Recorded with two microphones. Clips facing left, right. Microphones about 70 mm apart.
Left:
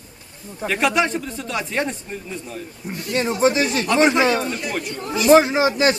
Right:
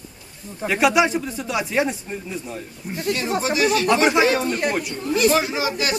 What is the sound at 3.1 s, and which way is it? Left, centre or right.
Speech, left.